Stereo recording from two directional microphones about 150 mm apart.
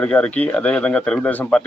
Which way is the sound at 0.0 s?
10° left (ahead or behind).